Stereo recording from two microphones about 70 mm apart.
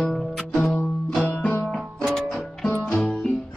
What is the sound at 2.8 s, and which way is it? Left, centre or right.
Music, centre.